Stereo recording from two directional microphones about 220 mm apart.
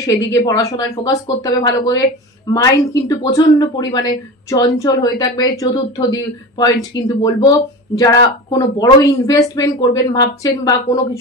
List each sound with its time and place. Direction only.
0.0 s speech: 15° left (ahead or behind)